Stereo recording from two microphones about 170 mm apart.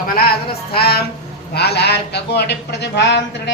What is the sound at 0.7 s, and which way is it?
Speech, 65° left (ahead or behind).